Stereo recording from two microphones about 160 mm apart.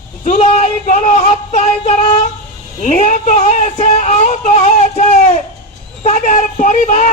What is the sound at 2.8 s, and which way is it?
Speech, 50° left (ahead or behind).